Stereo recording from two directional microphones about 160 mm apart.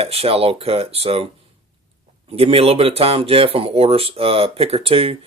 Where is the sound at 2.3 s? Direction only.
35° right (ahead or behind).